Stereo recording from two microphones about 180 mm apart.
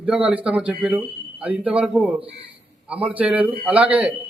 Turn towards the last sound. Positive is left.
turn(degrees=-5)  # may be behind; listen again after turning